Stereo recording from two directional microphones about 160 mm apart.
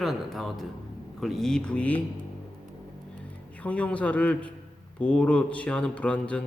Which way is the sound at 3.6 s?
10° left (ahead or behind).